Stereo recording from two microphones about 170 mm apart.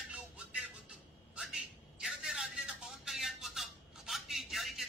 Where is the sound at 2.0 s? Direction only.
5° right (ahead or behind).